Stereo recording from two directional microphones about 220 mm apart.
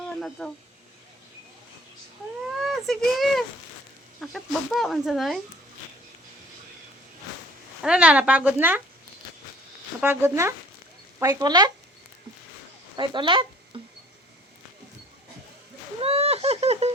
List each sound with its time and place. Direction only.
0.2 s speech: 5° left (ahead or behind)
2.6 s speech: centre (ahead or behind)
7.8 s speech: 5° right (ahead or behind)
10.0 s speech: 10° right (ahead or behind)
13.0 s speech: 20° right (ahead or behind)
16.0 s speech: 25° right (ahead or behind)